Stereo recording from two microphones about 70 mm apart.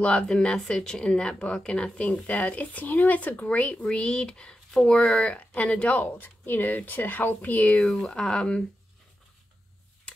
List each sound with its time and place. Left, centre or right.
0.0 s speech: centre
7.8 s speech: centre